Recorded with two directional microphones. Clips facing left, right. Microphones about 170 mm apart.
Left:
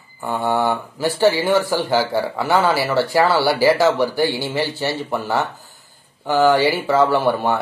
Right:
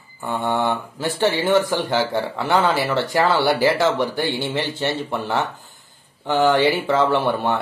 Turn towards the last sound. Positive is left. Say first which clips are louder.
# left 2 dB
turn(degrees=10)  # may be behind; listen again after turning